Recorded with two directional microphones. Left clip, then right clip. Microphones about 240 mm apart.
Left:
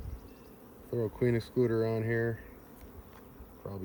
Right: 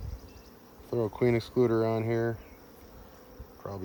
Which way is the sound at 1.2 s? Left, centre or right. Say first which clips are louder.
Right 4 dB; right.